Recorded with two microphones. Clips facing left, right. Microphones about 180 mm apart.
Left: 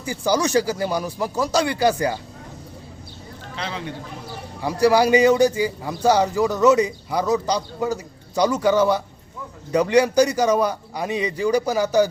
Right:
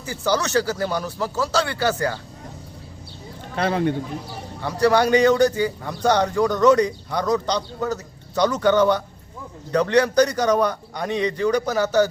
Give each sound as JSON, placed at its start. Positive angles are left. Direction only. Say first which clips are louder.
{"t": 0.0, "sound": "a man's voice", "louder": "left 2 dB", "side_deg": 10}
{"t": 3.5, "sound": "a man's voice", "louder": "right 9 dB", "side_deg": -50}
{"t": 4.6, "sound": "a man's voice", "louder": "left 1 dB", "side_deg": 10}